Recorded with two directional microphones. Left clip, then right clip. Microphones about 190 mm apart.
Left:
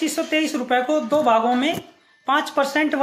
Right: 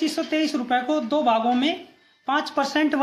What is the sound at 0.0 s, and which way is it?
Speech, 10° right (ahead or behind).